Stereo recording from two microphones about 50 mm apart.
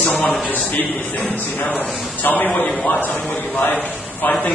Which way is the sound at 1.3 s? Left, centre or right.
Left.